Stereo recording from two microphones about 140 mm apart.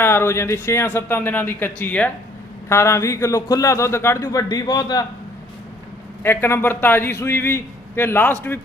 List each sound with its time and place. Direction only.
0.0 s a man's voice: 15° left (ahead or behind)
6.2 s a man's voice: 15° left (ahead or behind)